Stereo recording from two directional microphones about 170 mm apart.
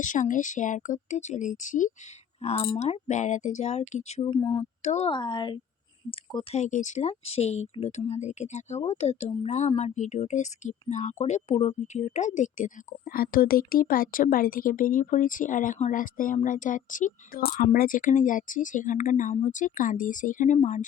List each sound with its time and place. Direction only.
0.0 s speech: 50° left (ahead or behind)
4.4 s speech: 10° left (ahead or behind)
4.8 s speech: 40° left (ahead or behind)
5.1 s speech: 25° left (ahead or behind); by 20.8 s 45° left (ahead or behind)